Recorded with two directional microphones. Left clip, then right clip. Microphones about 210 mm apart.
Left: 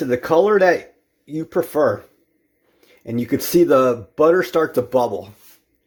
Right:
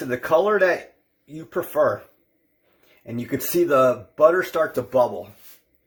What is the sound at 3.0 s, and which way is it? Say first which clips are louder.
Speech: left 6 dB; 45° left (ahead or behind).